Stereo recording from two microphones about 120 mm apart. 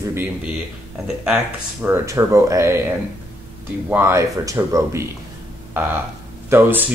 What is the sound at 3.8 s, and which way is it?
Speech, 15° right (ahead or behind).